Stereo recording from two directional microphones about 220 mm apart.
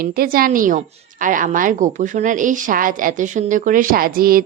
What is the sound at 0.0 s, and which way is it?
A woman's voice, 40° right (ahead or behind).